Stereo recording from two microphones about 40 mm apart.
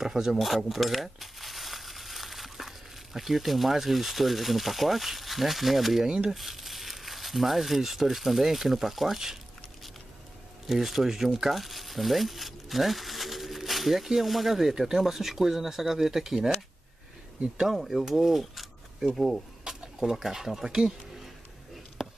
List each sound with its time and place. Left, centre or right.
0.0 s speech: centre
10.7 s speech: centre
17.6 s speech: centre
19.7 s a sound: right
20.2 s speech: centre
22.0 s a sound: centre